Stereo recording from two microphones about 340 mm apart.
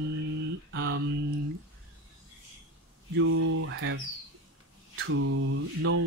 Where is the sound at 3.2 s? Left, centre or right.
Right.